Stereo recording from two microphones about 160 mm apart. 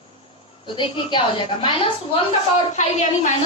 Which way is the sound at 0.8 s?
30° left (ahead or behind).